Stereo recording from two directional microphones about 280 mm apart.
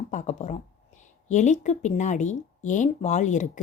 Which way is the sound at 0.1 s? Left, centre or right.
Left.